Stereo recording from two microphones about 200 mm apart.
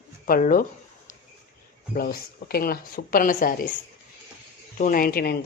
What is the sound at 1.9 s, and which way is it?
Speech, 50° left (ahead or behind).